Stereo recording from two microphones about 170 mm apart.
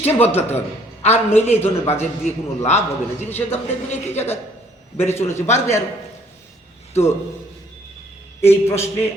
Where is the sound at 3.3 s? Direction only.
40° left (ahead or behind).